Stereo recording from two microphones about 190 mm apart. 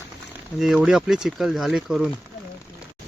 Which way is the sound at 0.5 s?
Centre (ahead or behind).